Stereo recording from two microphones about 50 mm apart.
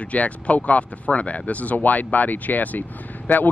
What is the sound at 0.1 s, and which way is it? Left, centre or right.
Speech, left.